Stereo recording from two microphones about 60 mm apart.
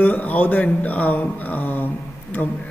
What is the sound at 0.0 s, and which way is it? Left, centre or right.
Speech, left.